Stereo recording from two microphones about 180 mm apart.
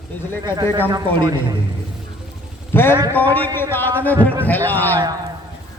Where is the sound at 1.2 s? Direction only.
25° right (ahead or behind).